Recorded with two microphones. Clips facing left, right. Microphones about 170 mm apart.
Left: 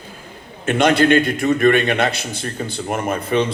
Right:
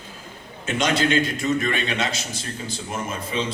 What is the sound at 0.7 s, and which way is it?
Speech, 60° left (ahead or behind).